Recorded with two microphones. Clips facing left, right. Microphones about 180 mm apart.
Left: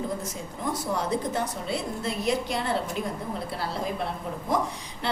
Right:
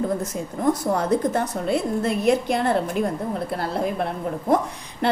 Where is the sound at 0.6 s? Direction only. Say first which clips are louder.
Right 7 dB; 55° right (ahead or behind).